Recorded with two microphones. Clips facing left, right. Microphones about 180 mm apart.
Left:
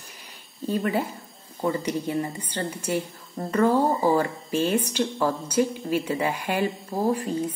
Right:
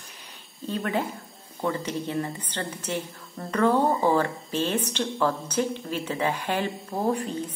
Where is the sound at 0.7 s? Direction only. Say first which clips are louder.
Left 3 dB; 5° left (ahead or behind).